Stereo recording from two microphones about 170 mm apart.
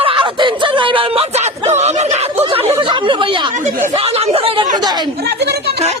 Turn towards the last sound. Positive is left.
turn(degrees=-35)  # may be behind; listen again after turning